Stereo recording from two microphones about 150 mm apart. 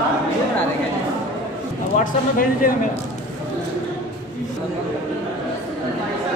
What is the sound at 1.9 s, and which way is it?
Speech, 70° left (ahead or behind).